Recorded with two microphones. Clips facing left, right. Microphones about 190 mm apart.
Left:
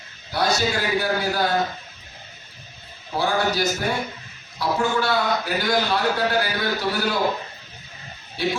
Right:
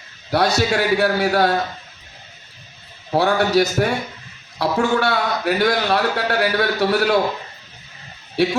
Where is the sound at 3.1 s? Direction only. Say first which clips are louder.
Right 6 dB; 65° right (ahead or behind).